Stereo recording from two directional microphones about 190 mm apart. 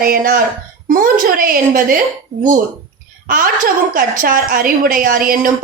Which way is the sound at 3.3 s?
45° right (ahead or behind).